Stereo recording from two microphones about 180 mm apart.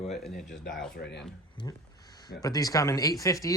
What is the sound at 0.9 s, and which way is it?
Speech, 70° left (ahead or behind).